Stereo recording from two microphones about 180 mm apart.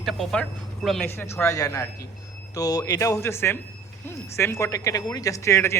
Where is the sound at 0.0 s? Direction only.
Centre (ahead or behind).